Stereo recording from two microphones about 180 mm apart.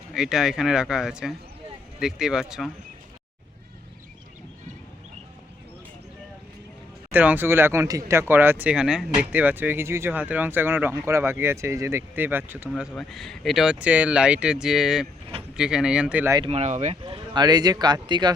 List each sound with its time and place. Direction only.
0.1 s speech: 5° right (ahead or behind)
7.1 s speech: 10° right (ahead or behind)
16.5 s speech: 40° right (ahead or behind)
17.0 s speech: 25° right (ahead or behind)